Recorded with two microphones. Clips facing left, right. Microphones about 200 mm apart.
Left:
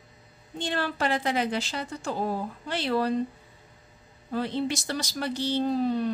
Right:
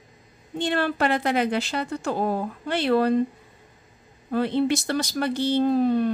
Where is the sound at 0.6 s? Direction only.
60° right (ahead or behind).